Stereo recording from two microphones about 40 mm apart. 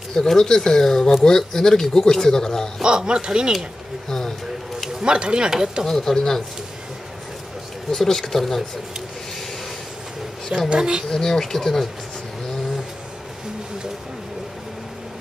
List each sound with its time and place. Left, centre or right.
0.1 s speech: centre
2.8 s speech: centre
5.0 s speech: right
5.9 s speech: centre
7.9 s speech: centre
10.7 s speech: right
11.1 s speech: centre